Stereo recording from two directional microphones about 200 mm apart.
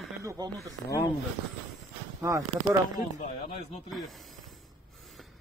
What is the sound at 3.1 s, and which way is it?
Speech, 35° left (ahead or behind).